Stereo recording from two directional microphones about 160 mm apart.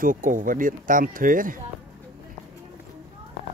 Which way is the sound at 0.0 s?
60° right (ahead or behind).